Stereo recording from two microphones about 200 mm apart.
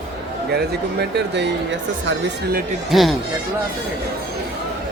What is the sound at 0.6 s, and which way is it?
Speech, 55° right (ahead or behind).